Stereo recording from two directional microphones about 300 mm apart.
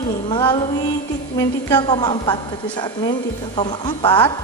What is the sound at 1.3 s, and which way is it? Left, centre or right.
A woman's voice, centre.